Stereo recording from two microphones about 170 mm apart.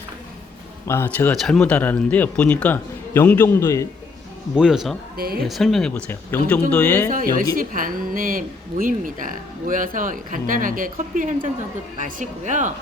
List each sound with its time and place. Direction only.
0.9 s speech: 10° left (ahead or behind)
4.5 s speech: 5° right (ahead or behind)
5.1 s speech: 60° right (ahead or behind)
5.5 s speech: centre (ahead or behind)
7.1 s speech: 55° right (ahead or behind)